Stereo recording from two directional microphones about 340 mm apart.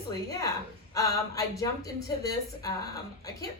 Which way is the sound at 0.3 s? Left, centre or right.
Centre.